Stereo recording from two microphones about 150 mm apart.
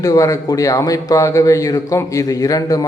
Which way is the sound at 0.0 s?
20° left (ahead or behind).